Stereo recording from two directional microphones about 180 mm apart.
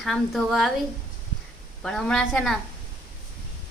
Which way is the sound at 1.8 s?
5° left (ahead or behind).